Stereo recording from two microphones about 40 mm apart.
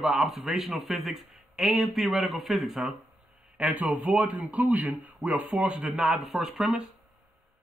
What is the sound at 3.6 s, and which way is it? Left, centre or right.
Speech, right.